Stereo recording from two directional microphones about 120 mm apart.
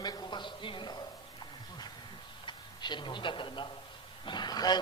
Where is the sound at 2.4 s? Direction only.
40° left (ahead or behind).